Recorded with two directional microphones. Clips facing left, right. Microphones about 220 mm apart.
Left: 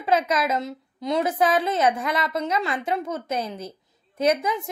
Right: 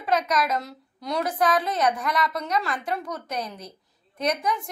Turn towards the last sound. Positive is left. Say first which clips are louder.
# left 4 dB
turn(degrees=25)  # may be behind; listen again after turning